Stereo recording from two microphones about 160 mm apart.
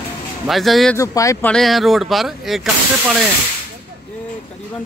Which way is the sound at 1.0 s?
20° left (ahead or behind).